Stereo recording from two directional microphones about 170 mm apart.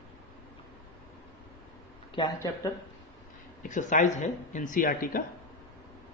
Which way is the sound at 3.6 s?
50° left (ahead or behind).